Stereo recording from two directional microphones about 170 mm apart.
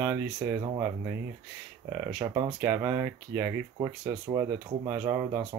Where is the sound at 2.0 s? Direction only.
15° right (ahead or behind).